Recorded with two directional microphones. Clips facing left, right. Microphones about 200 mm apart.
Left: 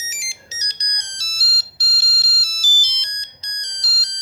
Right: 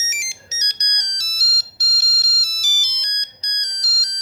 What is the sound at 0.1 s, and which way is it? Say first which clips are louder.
Ringtone: right 1 dB; 35° left (ahead or behind).